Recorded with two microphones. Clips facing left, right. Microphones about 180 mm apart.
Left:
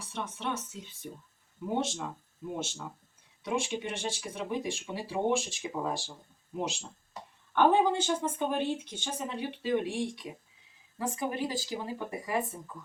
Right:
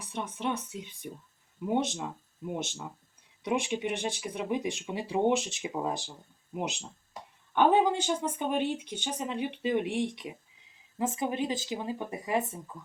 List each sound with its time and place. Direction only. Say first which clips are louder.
0.0 s speech: right 3 dB; 15° right (ahead or behind)